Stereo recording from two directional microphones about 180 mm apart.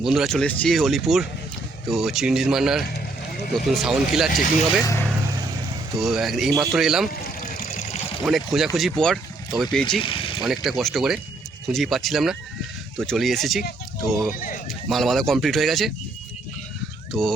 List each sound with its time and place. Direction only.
0.0 s speech: centre (ahead or behind)
6.0 s speech: centre (ahead or behind)
7.5 s vehicle: 55° left (ahead or behind)
8.2 s speech: centre (ahead or behind)
10.0 s a sound: 30° left (ahead or behind)
10.4 s speech: centre (ahead or behind)
14.3 s speech: 50° left (ahead or behind)
14.8 s speech: centre (ahead or behind)
17.1 s speech: centre (ahead or behind)